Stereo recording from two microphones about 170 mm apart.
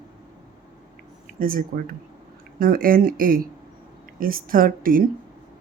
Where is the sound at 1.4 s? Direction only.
55° right (ahead or behind).